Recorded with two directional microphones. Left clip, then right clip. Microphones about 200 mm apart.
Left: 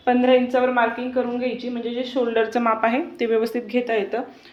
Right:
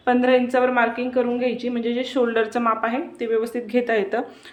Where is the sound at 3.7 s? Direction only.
20° right (ahead or behind).